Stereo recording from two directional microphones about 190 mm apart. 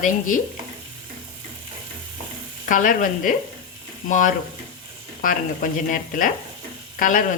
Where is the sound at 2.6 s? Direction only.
45° left (ahead or behind).